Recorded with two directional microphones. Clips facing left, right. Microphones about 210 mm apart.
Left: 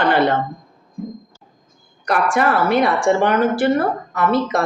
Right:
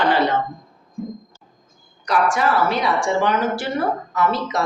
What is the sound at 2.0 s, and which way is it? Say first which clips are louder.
A woman's voice: left 2 dB; 55° left (ahead or behind).